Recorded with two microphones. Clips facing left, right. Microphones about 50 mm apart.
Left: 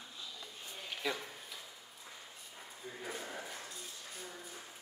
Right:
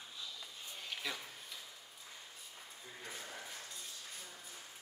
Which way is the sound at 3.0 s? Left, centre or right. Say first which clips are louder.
Left 5 dB; centre.